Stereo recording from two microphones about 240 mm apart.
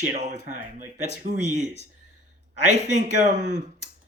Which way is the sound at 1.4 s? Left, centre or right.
Left.